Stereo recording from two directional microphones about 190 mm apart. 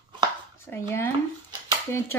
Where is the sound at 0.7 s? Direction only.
10° left (ahead or behind).